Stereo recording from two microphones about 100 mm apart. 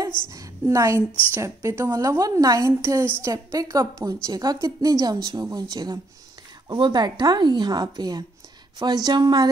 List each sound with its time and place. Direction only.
0.3 s a woman's voice: 35° right (ahead or behind)